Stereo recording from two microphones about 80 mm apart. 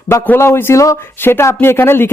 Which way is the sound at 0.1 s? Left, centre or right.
Left.